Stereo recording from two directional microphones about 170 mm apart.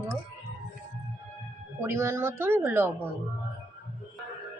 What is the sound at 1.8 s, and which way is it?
A woman's voice, 15° right (ahead or behind).